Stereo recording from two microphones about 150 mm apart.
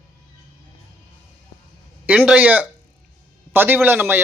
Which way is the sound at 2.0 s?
10° right (ahead or behind).